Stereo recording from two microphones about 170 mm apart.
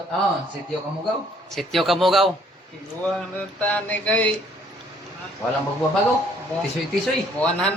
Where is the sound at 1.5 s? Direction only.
Centre (ahead or behind).